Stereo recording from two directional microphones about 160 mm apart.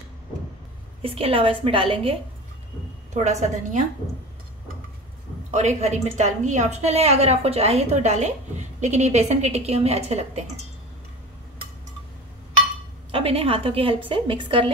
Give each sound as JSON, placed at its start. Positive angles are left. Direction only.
{"t": 1.0, "sound": "a woman's voice", "side_deg": -35}
{"t": 3.3, "sound": "a woman's voice", "side_deg": -45}
{"t": 5.5, "sound": "a woman's voice", "side_deg": -45}
{"t": 13.1, "sound": "a woman's voice", "side_deg": -35}